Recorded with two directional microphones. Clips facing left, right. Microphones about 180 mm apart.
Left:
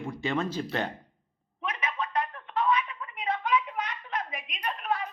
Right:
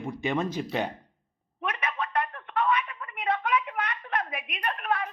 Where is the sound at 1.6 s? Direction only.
60° right (ahead or behind).